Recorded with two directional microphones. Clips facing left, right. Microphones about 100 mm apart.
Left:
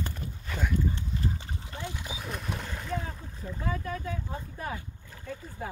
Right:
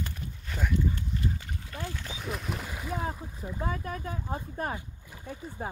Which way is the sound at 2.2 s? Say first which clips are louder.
Right 2 dB; centre (ahead or behind).